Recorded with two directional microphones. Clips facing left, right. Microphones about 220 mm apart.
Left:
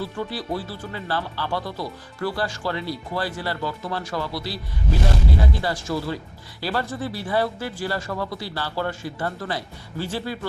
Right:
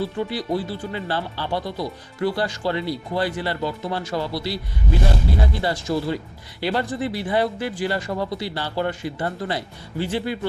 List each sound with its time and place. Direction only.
0.0 s speech: 20° right (ahead or behind)
5.6 s speech: 25° right (ahead or behind)